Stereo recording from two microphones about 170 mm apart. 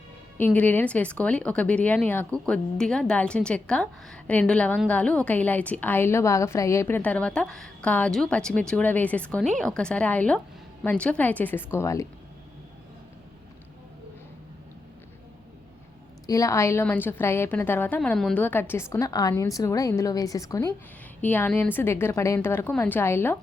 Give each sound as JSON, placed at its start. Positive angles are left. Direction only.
{"t": 0.3, "sound": "a woman's voice", "side_deg": 10}
{"t": 16.2, "sound": "a woman's voice", "side_deg": 20}